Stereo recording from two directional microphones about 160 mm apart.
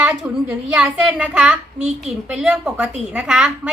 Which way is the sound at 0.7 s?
5° right (ahead or behind).